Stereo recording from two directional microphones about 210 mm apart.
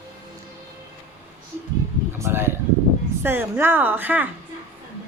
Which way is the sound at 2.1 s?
10° right (ahead or behind).